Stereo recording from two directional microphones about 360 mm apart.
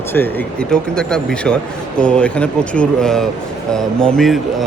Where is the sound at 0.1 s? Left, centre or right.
Centre.